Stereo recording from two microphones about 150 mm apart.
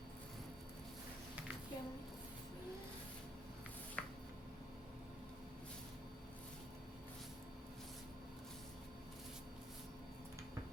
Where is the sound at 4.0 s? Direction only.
5° left (ahead or behind).